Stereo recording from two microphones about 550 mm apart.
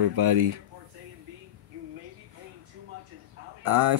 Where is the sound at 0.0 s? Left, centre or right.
Right.